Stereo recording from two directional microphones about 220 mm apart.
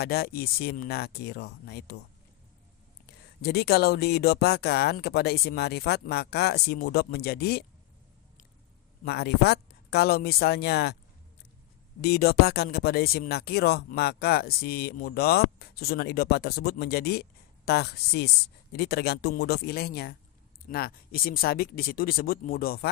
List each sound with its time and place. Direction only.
0.0 s speech: 45° left (ahead or behind)
3.1 s speech: 45° left (ahead or behind)
9.0 s speech: 45° left (ahead or behind)
12.0 s speech: 45° left (ahead or behind)